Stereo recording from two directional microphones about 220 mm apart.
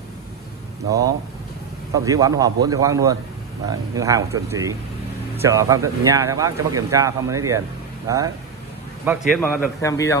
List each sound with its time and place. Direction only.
0.8 s speech: 15° right (ahead or behind)
9.3 s a man's voice: 10° left (ahead or behind)